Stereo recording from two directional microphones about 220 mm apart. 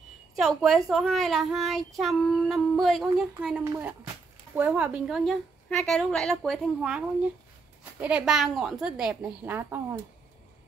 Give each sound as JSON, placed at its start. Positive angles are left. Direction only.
{"t": 0.4, "sound": "a child's voice", "side_deg": 0}
{"t": 8.0, "sound": "a child's voice", "side_deg": -5}